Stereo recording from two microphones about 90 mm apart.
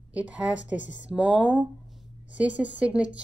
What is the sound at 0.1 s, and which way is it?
Speech, 15° right (ahead or behind).